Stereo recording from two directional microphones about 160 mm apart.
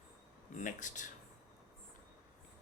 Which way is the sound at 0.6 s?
50° left (ahead or behind).